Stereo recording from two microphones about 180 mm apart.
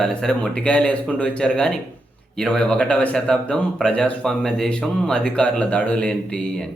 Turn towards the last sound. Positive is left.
turn(degrees=5)  # may be behind; listen again after turning